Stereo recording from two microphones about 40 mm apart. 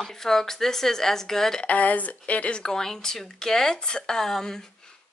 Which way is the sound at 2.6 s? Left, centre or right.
Centre.